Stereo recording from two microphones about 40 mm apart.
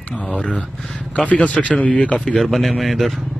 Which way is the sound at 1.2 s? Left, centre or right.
Left.